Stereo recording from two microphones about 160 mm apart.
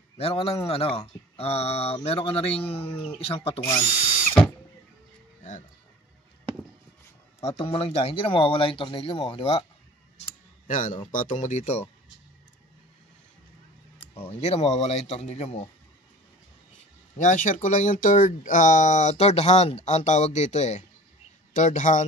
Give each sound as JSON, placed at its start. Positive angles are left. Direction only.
{"t": 0.2, "sound": "speech", "side_deg": 35}
{"t": 7.4, "sound": "speech", "side_deg": 35}
{"t": 10.7, "sound": "speech", "side_deg": 55}
{"t": 14.1, "sound": "speech", "side_deg": 35}
{"t": 17.2, "sound": "speech", "side_deg": 50}